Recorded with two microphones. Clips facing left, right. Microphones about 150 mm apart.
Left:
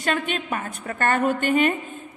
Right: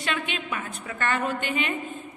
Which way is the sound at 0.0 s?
45° left (ahead or behind).